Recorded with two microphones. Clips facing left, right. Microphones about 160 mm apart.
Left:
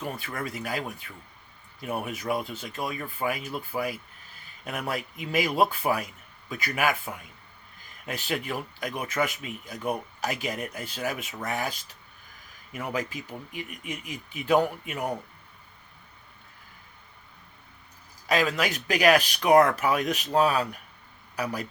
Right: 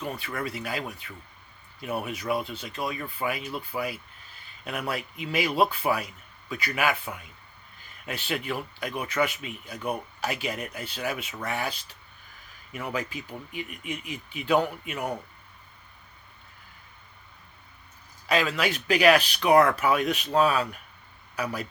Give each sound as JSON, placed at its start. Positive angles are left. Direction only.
{"t": 0.0, "sound": "speech", "side_deg": 45}
{"t": 12.9, "sound": "speech", "side_deg": 45}
{"t": 18.3, "sound": "speech", "side_deg": 45}